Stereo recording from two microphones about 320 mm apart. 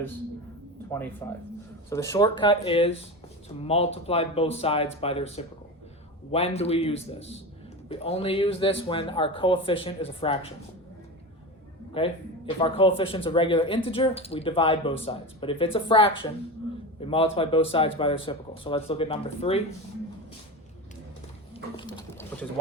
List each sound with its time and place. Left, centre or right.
0.9 s speech: centre
12.0 s speech: centre
21.5 s a sound: centre